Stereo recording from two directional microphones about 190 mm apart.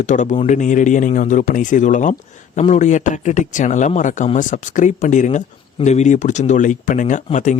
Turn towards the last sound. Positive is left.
turn(degrees=40)  # may be behind; listen again after turning